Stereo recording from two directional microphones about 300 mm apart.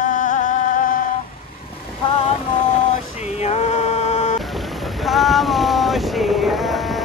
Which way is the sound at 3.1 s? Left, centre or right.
Left.